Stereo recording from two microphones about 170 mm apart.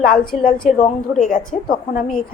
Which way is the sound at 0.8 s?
50° left (ahead or behind).